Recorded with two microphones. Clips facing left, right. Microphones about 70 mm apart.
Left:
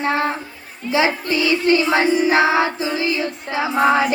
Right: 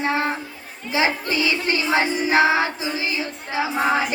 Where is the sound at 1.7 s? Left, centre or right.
Left.